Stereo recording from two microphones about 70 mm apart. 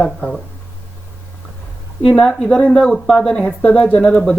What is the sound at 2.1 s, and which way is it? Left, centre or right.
Speech, centre.